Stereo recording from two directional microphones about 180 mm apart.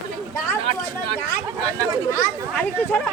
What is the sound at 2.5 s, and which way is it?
Speech, 10° left (ahead or behind).